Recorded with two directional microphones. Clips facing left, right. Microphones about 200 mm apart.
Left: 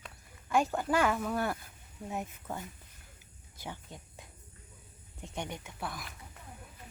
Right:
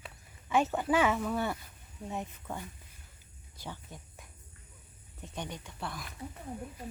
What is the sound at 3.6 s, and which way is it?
Speech, 15° left (ahead or behind).